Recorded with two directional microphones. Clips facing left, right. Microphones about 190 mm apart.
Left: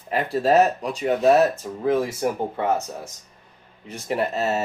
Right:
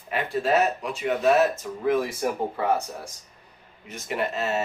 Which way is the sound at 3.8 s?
35° left (ahead or behind).